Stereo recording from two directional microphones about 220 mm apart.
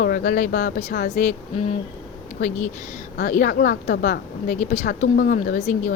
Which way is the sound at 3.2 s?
40° left (ahead or behind).